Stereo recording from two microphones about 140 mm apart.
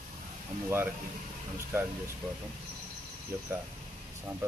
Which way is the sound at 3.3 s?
10° right (ahead or behind).